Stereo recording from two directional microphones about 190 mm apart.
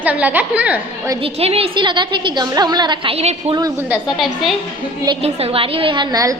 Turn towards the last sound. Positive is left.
turn(degrees=-20)  # may be behind; listen again after turning